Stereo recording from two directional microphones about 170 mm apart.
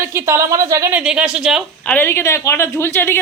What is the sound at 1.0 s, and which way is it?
Speech, 5° right (ahead or behind).